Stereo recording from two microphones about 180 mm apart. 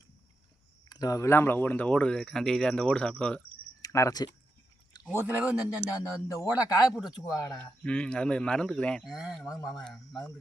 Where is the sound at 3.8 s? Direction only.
20° left (ahead or behind).